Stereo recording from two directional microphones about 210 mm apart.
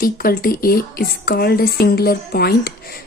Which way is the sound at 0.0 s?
45° left (ahead or behind).